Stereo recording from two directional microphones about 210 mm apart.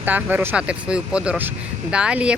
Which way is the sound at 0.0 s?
10° right (ahead or behind).